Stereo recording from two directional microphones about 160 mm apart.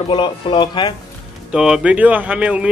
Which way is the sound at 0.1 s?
30° left (ahead or behind).